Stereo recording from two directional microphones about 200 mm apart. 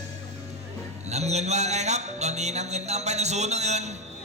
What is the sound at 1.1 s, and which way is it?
A man's voice, 35° right (ahead or behind).